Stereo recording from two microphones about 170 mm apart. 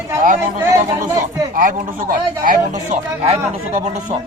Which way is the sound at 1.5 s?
50° right (ahead or behind).